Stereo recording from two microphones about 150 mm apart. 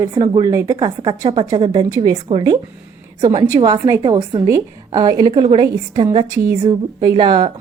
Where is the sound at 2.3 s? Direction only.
40° right (ahead or behind).